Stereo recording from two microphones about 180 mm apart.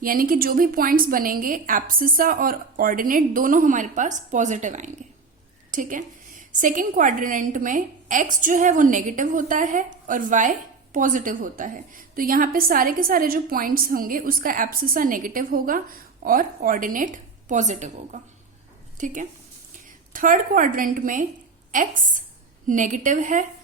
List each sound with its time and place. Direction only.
0.0 s a woman's voice: 50° right (ahead or behind)